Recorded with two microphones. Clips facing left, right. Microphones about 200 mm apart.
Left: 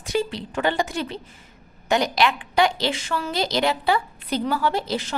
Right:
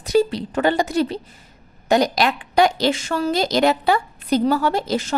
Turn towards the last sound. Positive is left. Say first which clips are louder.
# right 3 dB
turn(degrees=-45)  # may be behind; listen again after turning